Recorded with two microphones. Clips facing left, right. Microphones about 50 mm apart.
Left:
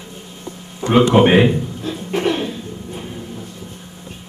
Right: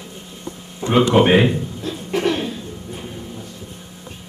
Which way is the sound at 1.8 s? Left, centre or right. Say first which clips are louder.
Left 1 dB; centre.